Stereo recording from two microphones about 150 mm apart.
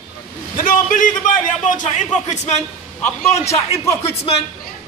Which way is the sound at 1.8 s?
50° left (ahead or behind).